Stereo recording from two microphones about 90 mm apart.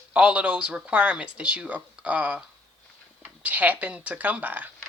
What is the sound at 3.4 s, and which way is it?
Speech, 20° right (ahead or behind).